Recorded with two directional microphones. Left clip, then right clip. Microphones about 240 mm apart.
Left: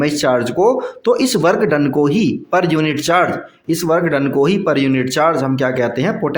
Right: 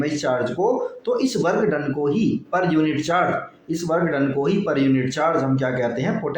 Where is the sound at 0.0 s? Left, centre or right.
Left.